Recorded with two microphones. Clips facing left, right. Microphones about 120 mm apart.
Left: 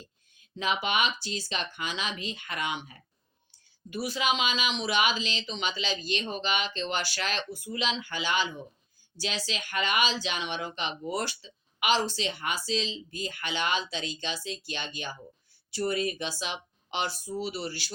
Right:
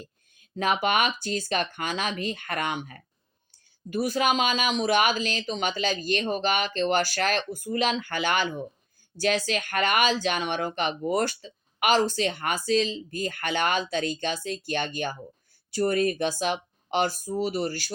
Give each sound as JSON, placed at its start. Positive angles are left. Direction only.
{"t": 0.0, "sound": "speech", "side_deg": -50}